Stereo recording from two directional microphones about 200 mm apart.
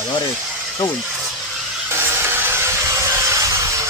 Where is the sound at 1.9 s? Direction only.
10° right (ahead or behind).